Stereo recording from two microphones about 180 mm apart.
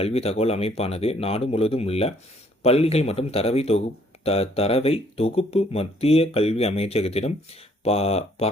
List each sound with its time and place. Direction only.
0.0 s speech: 35° left (ahead or behind)